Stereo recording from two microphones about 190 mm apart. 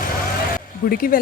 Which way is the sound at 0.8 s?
50° left (ahead or behind).